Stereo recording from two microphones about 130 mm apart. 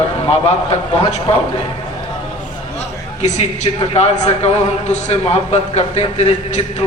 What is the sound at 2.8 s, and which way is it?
A man's voice, 60° left (ahead or behind).